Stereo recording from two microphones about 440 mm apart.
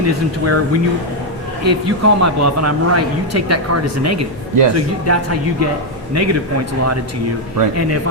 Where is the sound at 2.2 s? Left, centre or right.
Right.